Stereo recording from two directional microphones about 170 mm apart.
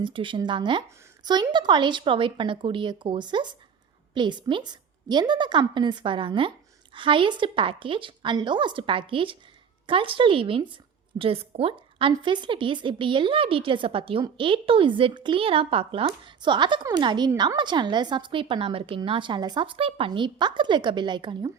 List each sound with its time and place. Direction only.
0.0 s a woman's voice: 30° right (ahead or behind)